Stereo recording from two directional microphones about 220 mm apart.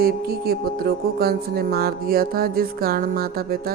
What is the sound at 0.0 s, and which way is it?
Music, 45° right (ahead or behind).